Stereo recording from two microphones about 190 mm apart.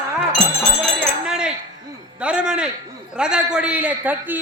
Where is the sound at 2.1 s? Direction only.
5° right (ahead or behind).